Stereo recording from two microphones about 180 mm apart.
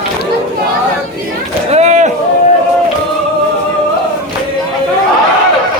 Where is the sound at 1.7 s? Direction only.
40° right (ahead or behind).